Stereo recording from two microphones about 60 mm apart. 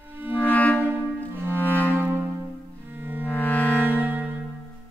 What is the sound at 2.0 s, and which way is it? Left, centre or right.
Brass instrument, right.